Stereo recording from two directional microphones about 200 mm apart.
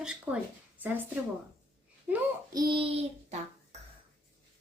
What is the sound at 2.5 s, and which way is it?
Speech, 25° right (ahead or behind).